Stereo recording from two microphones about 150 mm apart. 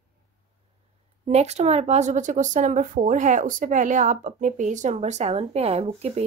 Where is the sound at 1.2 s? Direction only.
45° right (ahead or behind).